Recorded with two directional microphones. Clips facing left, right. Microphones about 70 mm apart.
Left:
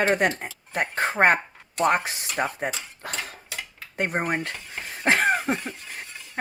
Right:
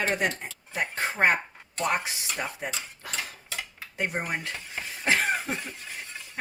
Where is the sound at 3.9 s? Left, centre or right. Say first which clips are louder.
Left 5 dB; left.